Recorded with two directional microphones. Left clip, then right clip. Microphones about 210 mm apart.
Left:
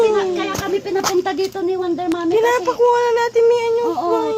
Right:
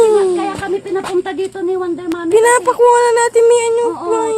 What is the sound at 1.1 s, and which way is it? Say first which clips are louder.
Speech: even; 15° right (ahead or behind).